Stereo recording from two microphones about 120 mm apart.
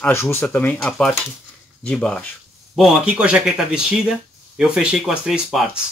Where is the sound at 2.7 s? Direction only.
5° right (ahead or behind).